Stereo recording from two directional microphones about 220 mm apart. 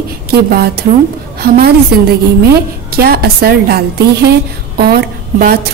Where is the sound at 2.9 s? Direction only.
45° right (ahead or behind).